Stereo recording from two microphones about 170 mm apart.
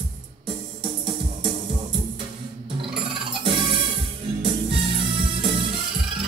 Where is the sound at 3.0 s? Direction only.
30° right (ahead or behind).